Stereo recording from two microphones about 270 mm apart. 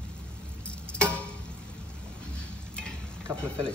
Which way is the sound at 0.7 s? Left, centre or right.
Centre.